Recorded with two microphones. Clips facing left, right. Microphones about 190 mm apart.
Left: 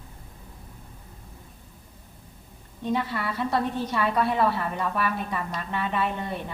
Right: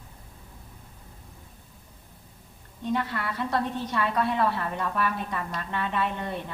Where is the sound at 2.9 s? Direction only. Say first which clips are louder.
Left 1 dB; 5° left (ahead or behind).